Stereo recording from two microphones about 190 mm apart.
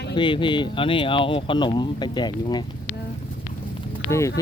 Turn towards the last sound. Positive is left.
turn(degrees=15)  # may be behind; listen again after turning